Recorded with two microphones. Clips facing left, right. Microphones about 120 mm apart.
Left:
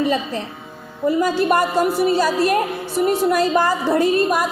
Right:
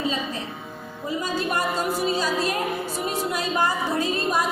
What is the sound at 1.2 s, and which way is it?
A woman's voice, 75° left (ahead or behind).